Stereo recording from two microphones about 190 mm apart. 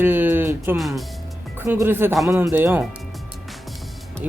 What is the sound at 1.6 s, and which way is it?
Speech, 10° right (ahead or behind).